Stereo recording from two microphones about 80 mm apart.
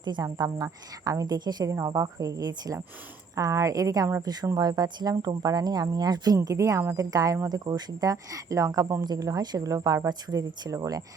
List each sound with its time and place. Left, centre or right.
0.0 s speech: right
1.9 s speech: right